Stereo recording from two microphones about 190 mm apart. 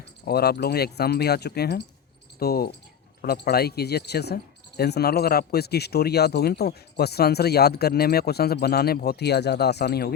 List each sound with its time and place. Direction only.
0.3 s speech: 55° left (ahead or behind)